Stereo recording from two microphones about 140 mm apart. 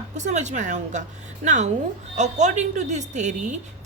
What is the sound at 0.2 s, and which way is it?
A woman's voice, 55° right (ahead or behind).